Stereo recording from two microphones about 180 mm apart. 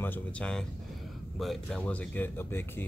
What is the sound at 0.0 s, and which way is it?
Speech, 10° left (ahead or behind).